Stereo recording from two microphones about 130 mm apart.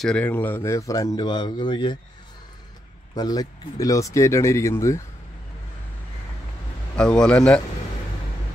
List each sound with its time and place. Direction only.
0.0 s speech: 10° left (ahead or behind); by 2.0 s 35° left (ahead or behind)
3.2 s speech: 30° left (ahead or behind)
7.0 s a man's voice: 5° left (ahead or behind)